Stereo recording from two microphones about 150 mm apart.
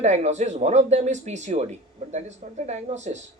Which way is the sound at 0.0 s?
50° right (ahead or behind).